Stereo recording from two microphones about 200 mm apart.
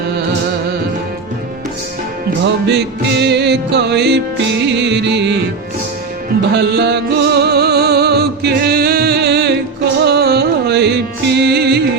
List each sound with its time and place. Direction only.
2.4 s music: 60° right (ahead or behind)
6.5 s music: 55° right (ahead or behind)